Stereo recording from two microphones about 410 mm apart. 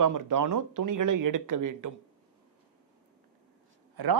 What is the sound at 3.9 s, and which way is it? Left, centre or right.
Speech, right.